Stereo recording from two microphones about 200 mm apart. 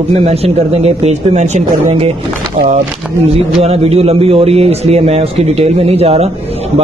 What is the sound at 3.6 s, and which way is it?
A man's voice, 30° right (ahead or behind).